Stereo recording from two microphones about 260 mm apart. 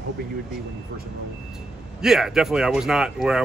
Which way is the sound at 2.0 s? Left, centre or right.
Centre.